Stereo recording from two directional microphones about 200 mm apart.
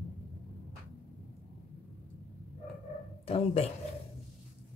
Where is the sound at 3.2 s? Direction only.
30° left (ahead or behind).